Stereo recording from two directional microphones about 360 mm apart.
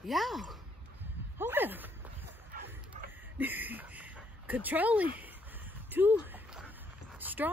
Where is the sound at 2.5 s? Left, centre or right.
Right.